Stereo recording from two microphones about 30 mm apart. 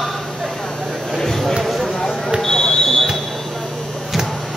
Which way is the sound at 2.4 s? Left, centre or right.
Centre.